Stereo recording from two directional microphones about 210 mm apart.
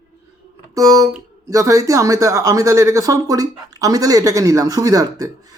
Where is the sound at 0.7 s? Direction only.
15° right (ahead or behind).